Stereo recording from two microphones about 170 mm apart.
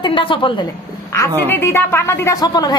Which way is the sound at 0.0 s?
30° left (ahead or behind).